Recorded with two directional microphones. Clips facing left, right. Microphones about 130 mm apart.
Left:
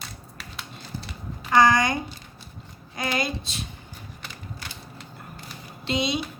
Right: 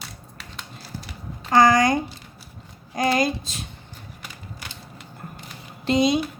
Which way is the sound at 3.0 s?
40° right (ahead or behind).